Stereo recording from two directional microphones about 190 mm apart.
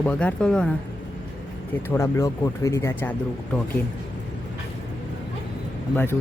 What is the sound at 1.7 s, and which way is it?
Speech, 15° left (ahead or behind).